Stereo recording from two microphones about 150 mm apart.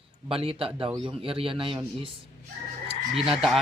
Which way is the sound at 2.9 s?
40° right (ahead or behind).